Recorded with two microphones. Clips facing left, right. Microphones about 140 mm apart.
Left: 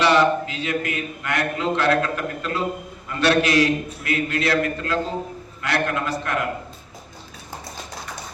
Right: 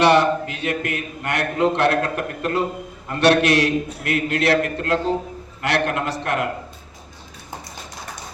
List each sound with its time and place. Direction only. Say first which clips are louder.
0.0 s a man's voice: right 2 dB; 60° right (ahead or behind); by 6.4 s 75° right (ahead or behind)